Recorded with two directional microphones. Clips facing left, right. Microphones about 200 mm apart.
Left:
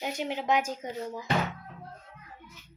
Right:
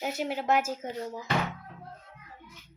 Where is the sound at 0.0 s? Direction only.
5° right (ahead or behind).